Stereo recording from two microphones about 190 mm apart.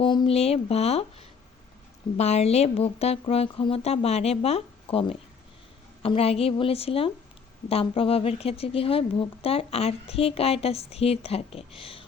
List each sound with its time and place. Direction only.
0.0 s speech: 25° left (ahead or behind)
2.1 s speech: 35° left (ahead or behind)